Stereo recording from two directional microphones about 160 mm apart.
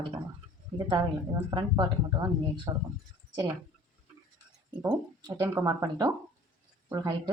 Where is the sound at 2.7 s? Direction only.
25° right (ahead or behind).